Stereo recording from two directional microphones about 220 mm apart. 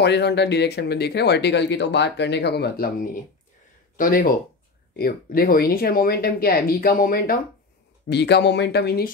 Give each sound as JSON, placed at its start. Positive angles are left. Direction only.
{"t": 0.0, "sound": "speech", "side_deg": 50}